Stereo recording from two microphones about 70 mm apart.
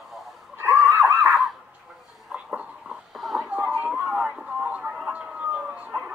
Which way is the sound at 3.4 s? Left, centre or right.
Right.